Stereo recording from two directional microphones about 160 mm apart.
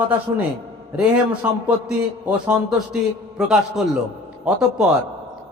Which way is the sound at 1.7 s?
5° right (ahead or behind).